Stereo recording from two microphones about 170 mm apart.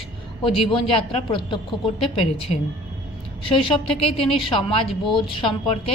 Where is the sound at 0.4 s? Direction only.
30° left (ahead or behind).